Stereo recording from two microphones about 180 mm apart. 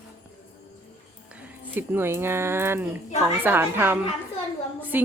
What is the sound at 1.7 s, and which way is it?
Speech, 10° right (ahead or behind).